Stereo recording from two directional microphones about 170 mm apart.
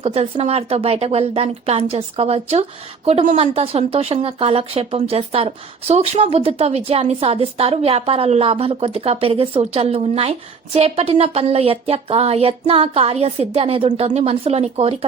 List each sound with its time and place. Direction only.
0.0 s a woman's voice: 35° right (ahead or behind)